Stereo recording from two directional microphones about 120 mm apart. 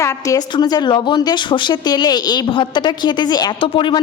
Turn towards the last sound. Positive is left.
turn(degrees=45)  # may be behind; listen again after turning